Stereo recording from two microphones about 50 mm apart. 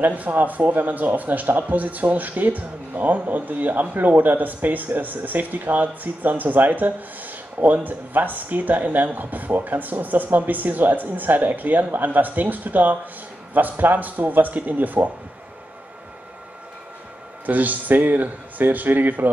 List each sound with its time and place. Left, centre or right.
0.0 s speech: right
17.5 s speech: right